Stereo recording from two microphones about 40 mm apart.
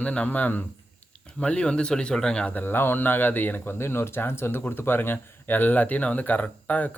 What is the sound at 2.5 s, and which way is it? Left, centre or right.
Speech, left.